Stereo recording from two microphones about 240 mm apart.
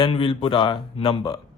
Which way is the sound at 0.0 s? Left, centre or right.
Centre.